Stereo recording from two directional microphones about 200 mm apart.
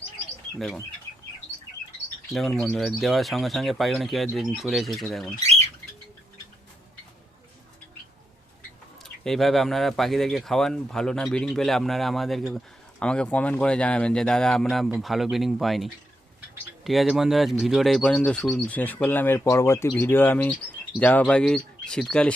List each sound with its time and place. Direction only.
2.6 s speech: centre (ahead or behind)
5.4 s bird: 35° right (ahead or behind)
9.0 s speech: centre (ahead or behind)